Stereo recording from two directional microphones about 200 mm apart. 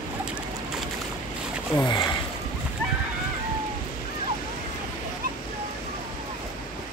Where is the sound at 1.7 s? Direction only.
20° left (ahead or behind).